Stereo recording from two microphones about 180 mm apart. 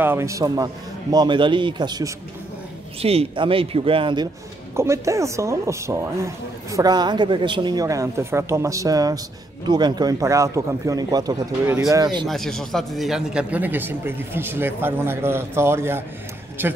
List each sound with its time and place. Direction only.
0.0 s a woman's voice: 15° right (ahead or behind)
3.0 s speech: 35° right (ahead or behind)
4.7 s a woman's voice: 15° right (ahead or behind)
12.3 s a woman's voice: centre (ahead or behind)